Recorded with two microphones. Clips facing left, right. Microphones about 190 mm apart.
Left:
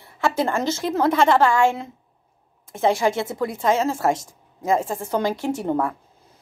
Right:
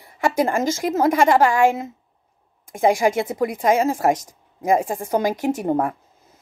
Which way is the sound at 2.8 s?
15° right (ahead or behind).